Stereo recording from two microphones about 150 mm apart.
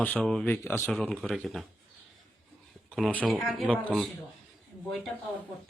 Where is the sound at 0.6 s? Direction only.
20° left (ahead or behind).